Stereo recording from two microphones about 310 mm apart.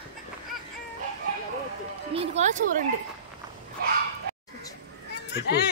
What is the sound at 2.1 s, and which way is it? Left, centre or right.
Speech, centre.